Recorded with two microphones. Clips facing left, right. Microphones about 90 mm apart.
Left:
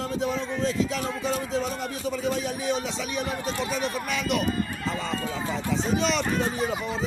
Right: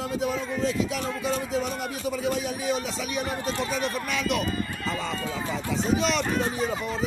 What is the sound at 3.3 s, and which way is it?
Speech, 40° right (ahead or behind).